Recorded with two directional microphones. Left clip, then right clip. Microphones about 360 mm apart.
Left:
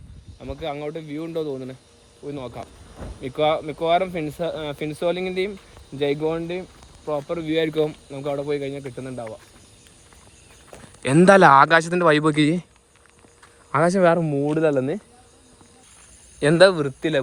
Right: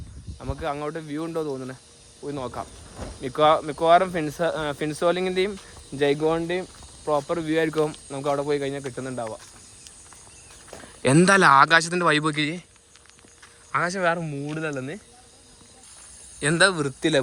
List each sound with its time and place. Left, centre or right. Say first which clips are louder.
0.3 s speech: even; centre
11.0 s speech: left 4 dB; centre
13.7 s speech: left 6 dB; centre
16.4 s speech: left 5 dB; centre